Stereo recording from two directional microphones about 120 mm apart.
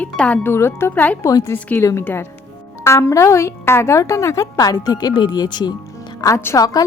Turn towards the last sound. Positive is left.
turn(degrees=30)  # may be behind; listen again after turning